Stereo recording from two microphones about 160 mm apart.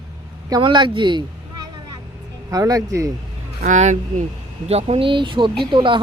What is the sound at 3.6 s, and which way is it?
Speech, 50° right (ahead or behind).